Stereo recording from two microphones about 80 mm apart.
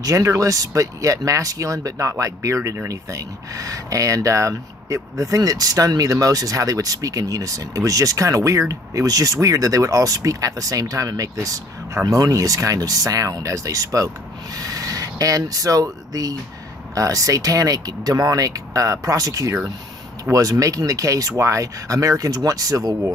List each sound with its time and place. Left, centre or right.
0.0 s speech: right